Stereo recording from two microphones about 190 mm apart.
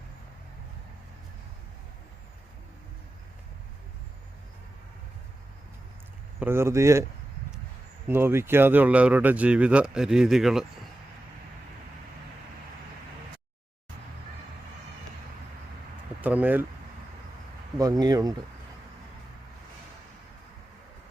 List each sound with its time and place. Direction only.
6.4 s speech: 15° right (ahead or behind)
8.0 s speech: 10° right (ahead or behind)
16.2 s speech: 10° right (ahead or behind)
18.0 s speech: 20° right (ahead or behind)